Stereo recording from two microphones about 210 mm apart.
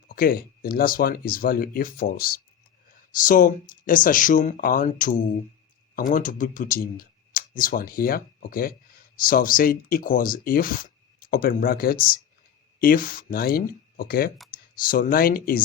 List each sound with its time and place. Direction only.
0.1 s speech: 45° left (ahead or behind)